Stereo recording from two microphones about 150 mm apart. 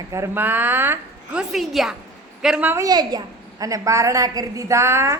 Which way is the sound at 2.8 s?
25° right (ahead or behind).